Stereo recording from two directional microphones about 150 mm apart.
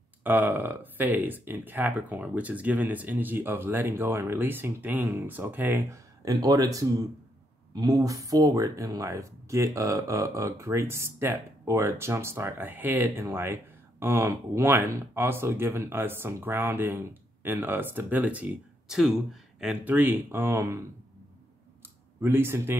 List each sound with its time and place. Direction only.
0.2 s speech: 10° right (ahead or behind)
6.2 s speech: 25° right (ahead or behind)
22.2 s speech: 15° right (ahead or behind)